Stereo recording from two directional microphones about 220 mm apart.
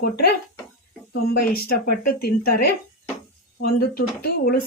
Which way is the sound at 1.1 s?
45° left (ahead or behind).